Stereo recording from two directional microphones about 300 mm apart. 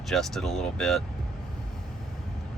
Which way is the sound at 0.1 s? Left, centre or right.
Centre.